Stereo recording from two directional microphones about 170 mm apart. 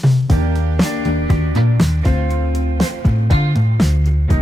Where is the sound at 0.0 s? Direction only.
Centre (ahead or behind).